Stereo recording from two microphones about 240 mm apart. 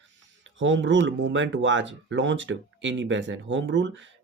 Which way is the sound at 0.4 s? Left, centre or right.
Right.